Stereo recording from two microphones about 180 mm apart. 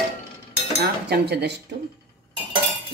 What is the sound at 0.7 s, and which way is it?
Cutlery, 65° right (ahead or behind).